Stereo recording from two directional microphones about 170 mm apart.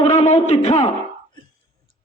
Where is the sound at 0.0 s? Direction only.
40° left (ahead or behind).